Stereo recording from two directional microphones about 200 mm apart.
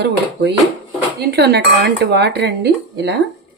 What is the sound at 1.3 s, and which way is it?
Speech, 55° right (ahead or behind).